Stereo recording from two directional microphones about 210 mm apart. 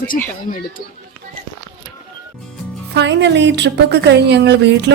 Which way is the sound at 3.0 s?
55° right (ahead or behind).